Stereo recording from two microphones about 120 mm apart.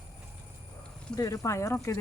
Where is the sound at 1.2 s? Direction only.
25° left (ahead or behind).